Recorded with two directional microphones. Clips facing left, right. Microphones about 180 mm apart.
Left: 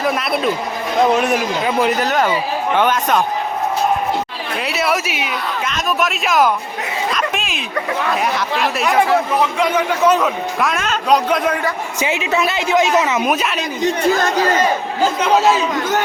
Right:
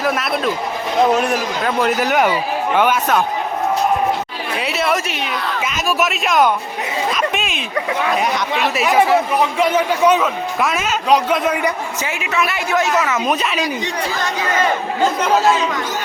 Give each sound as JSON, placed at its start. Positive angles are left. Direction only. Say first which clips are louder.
{"t": 0.0, "sound": "a man's voice", "louder": "left 1 dB", "side_deg": 0}
{"t": 1.6, "sound": "a man's voice", "louder": "right 1 dB", "side_deg": 5}
{"t": 2.0, "sound": "speech", "louder": "right 1 dB", "side_deg": -10}
{"t": 4.5, "sound": "a man's voice", "louder": "even", "side_deg": 0}
{"t": 7.1, "sound": "a sound", "louder": "right 1 dB", "side_deg": 0}
{"t": 8.1, "sound": "a man's voice", "louder": "even", "side_deg": 0}
{"t": 10.1, "sound": "a man's voice", "louder": "even", "side_deg": 0}
{"t": 11.9, "sound": "a woman's voice", "louder": "left 3 dB", "side_deg": 20}
{"t": 13.2, "sound": "a man's voice", "louder": "left 1 dB", "side_deg": 5}
{"t": 13.8, "sound": "speech", "louder": "left 6 dB", "side_deg": 45}
{"t": 15.2, "sound": "a man's voice", "louder": "left 2 dB", "side_deg": 0}